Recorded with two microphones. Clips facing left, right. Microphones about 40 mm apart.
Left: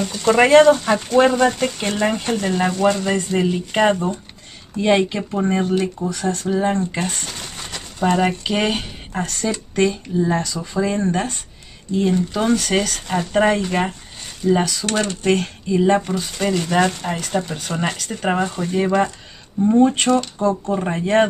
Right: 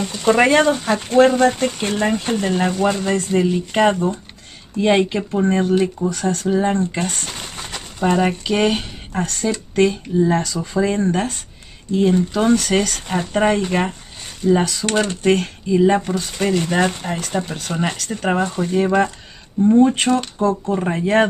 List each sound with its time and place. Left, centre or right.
0.0 s speech: centre
7.2 s a sound: centre
9.4 s speech: centre
10.8 s speech: centre
19.6 s speech: centre
20.1 s speech: centre